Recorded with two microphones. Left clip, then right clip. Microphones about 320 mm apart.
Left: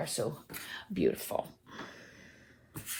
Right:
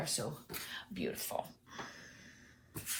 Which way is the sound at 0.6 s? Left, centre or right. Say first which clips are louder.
Left 11 dB; left.